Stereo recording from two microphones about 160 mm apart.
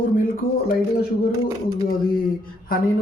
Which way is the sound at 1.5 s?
20° right (ahead or behind).